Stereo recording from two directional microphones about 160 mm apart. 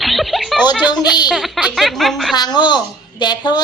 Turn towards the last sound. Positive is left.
turn(degrees=25)  # may be behind; listen again after turning